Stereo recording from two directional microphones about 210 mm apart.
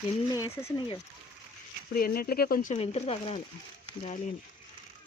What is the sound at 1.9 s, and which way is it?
Speech, 45° left (ahead or behind).